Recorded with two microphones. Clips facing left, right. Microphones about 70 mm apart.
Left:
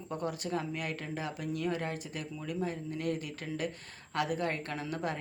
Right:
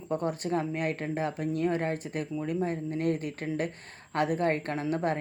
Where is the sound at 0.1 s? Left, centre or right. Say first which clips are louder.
Right 6 dB; right.